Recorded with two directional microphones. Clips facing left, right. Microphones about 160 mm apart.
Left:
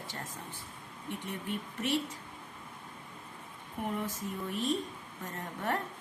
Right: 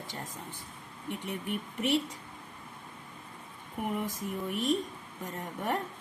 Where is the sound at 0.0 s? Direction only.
15° right (ahead or behind).